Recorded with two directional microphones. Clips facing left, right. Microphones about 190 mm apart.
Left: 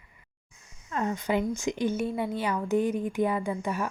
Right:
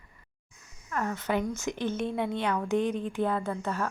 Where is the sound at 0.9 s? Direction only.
20° left (ahead or behind).